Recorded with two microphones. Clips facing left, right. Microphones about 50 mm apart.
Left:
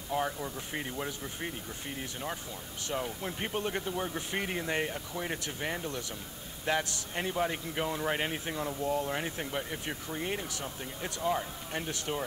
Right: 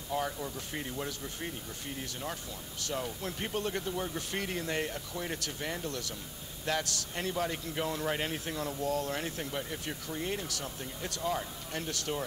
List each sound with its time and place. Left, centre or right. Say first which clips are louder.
0.1 s a man's voice: left 2 dB; centre